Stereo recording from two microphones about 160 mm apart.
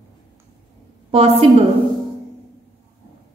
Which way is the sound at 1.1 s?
35° right (ahead or behind).